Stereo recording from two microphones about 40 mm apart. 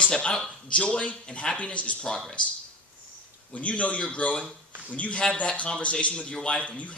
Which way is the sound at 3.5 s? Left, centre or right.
Left.